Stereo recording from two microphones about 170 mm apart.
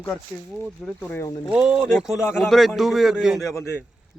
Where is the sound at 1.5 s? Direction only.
5° right (ahead or behind).